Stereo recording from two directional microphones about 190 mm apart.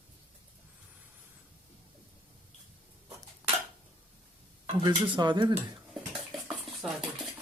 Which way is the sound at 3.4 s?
15° right (ahead or behind).